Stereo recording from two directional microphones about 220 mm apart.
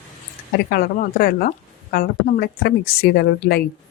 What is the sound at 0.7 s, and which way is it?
A woman's voice, 45° left (ahead or behind).